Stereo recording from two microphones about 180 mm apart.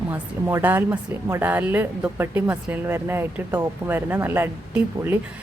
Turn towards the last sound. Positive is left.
turn(degrees=-10)  # may be behind; listen again after turning